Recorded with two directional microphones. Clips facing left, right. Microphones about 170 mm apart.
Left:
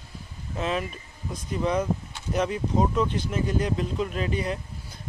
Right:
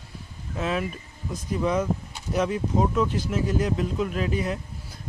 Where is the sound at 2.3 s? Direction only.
Centre (ahead or behind).